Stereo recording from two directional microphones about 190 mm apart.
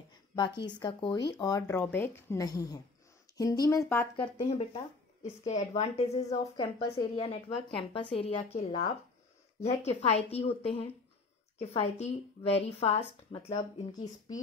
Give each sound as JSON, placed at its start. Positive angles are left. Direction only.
{"t": 0.6, "sound": "speech", "side_deg": 25}
{"t": 4.4, "sound": "speech", "side_deg": 30}